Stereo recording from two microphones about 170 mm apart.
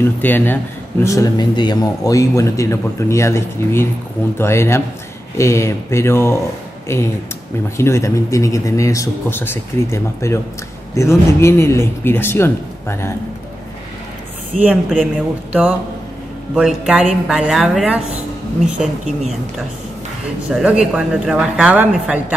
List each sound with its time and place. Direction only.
0.0 s a man's voice: 10° left (ahead or behind)
14.5 s a woman's voice: 45° right (ahead or behind)
14.9 s speech: 5° left (ahead or behind)
16.5 s speech: 5° right (ahead or behind)
20.4 s a woman's voice: 5° right (ahead or behind)